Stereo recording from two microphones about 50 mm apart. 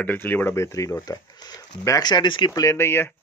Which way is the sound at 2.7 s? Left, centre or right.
Left.